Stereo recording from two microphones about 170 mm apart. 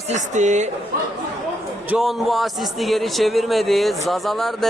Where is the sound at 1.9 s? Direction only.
Centre (ahead or behind).